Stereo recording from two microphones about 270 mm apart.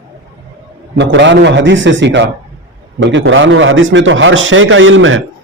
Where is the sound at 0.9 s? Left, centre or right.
Right.